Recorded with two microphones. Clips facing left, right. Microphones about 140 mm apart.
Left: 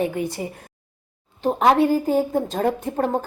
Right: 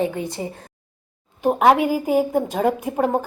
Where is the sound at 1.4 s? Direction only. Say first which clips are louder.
Right 1 dB; 10° right (ahead or behind).